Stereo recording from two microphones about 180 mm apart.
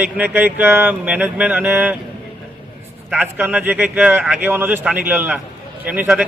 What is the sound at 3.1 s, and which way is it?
Speech, 10° right (ahead or behind).